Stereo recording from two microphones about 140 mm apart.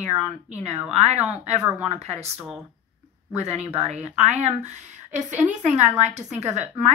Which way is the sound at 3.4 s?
50° right (ahead or behind).